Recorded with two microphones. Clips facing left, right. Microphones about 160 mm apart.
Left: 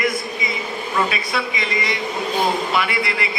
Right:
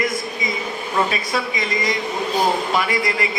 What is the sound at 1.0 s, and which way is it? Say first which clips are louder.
A woman's voice: right 1 dB; 40° right (ahead or behind).